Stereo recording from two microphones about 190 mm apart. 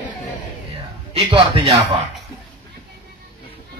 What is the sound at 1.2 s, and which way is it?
Speech, 30° right (ahead or behind).